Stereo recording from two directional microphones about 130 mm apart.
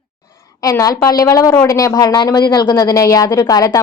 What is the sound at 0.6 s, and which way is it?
Speech, 25° left (ahead or behind).